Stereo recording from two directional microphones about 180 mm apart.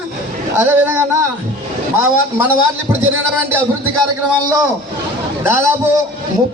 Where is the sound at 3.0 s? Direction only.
10° right (ahead or behind).